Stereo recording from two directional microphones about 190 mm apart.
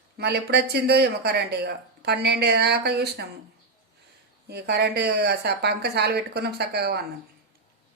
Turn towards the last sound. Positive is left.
turn(degrees=-60)  # may be behind; listen again after turning